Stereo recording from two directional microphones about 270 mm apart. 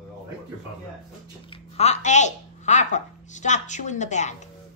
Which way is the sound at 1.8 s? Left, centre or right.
Left.